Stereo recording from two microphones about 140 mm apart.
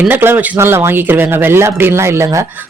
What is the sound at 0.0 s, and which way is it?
Speech, 15° right (ahead or behind).